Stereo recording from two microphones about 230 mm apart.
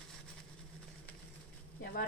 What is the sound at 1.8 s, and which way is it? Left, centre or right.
Speech, left.